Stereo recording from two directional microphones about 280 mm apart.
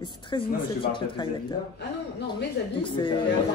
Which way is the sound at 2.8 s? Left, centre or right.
Centre.